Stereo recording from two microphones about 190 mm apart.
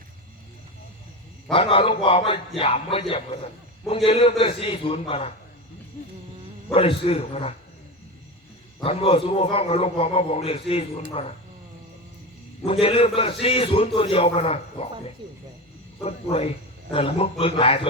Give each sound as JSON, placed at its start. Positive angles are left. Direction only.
{"t": 1.5, "sound": "a man's voice", "side_deg": 30}
{"t": 6.7, "sound": "a man's voice", "side_deg": 30}
{"t": 8.8, "sound": "a man's voice", "side_deg": 30}
{"t": 12.6, "sound": "a man's voice", "side_deg": 30}
{"t": 16.0, "sound": "a man's voice", "side_deg": 30}